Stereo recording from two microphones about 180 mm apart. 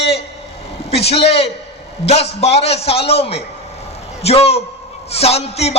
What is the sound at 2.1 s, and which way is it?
A man's voice, 35° left (ahead or behind).